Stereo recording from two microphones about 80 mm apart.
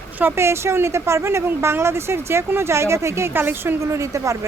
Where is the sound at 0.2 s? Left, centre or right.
Right.